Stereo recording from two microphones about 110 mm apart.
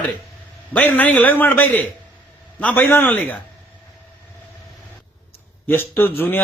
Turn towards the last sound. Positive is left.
turn(degrees=20)  # may be behind; listen again after turning